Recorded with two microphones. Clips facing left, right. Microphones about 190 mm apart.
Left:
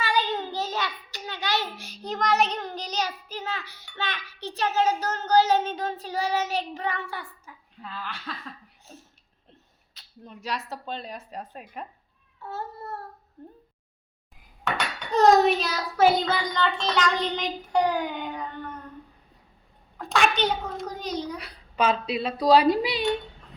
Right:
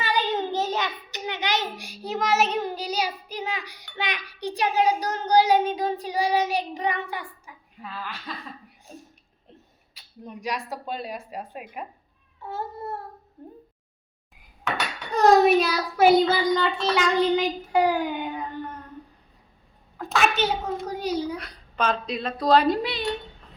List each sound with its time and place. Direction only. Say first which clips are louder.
0.0 s a child's voice: right 1 dB; 20° right (ahead or behind)
9.9 s a sound: right 5 dB; 15° right (ahead or behind)
10.7 s a child's voice: right 3 dB; 10° right (ahead or behind)
15.1 s a child's voice: right 1 dB; 10° right (ahead or behind)
20.0 s a child's voice: even; centre (ahead or behind)
21.3 s speech: left 1 dB; 5° left (ahead or behind)